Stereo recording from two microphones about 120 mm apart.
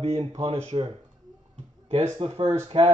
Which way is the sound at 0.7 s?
50° right (ahead or behind).